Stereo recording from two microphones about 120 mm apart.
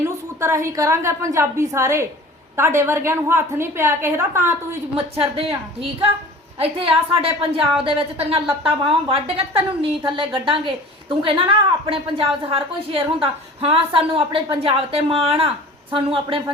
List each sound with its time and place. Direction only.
0.0 s a woman's voice: 25° right (ahead or behind)
5.1 s a woman's voice: 55° right (ahead or behind)